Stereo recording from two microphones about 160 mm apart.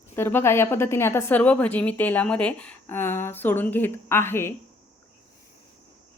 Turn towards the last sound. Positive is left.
turn(degrees=15)  # may be behind; listen again after turning